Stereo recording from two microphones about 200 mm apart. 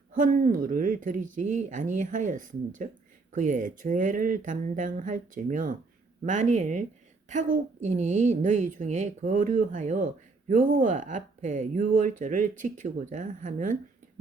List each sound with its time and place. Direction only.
0.1 s speech: 40° right (ahead or behind)